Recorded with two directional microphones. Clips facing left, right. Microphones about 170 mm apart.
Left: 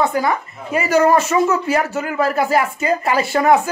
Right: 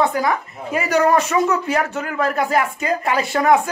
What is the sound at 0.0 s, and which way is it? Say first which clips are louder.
Speech: left 1 dB; centre (ahead or behind).